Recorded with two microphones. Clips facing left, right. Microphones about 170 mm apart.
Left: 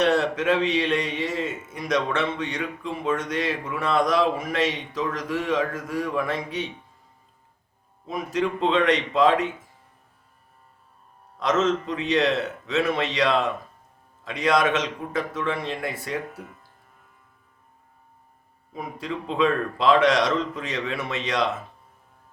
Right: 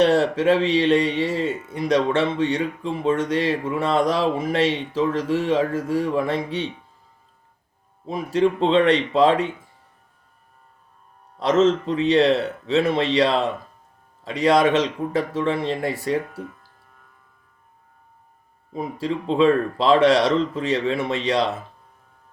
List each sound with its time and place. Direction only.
0.0 s speech: 30° right (ahead or behind)
8.0 s speech: 30° right (ahead or behind)
11.3 s speech: 30° right (ahead or behind)
18.7 s speech: 30° right (ahead or behind)